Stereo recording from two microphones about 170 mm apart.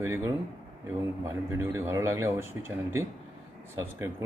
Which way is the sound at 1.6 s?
15° right (ahead or behind).